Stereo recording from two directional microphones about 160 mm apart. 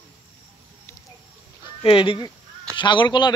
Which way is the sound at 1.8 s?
35° left (ahead or behind).